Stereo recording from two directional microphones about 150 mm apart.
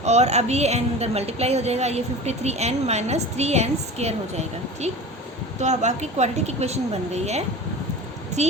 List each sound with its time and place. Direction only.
0.0 s a woman's voice: 50° right (ahead or behind)